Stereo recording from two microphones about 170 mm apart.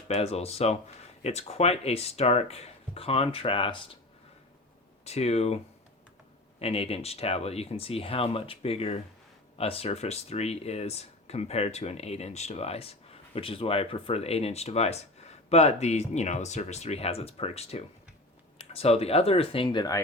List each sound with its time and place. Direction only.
0.1 s speech: 40° left (ahead or behind)
5.0 s speech: 40° left (ahead or behind)
6.6 s speech: 35° left (ahead or behind)